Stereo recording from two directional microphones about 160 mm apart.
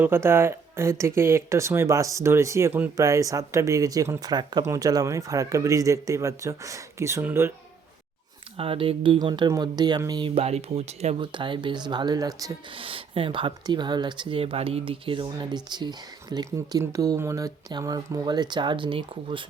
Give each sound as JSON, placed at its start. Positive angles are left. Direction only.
{"t": 0.0, "sound": "speech", "side_deg": -15}
{"t": 8.5, "sound": "speech", "side_deg": -35}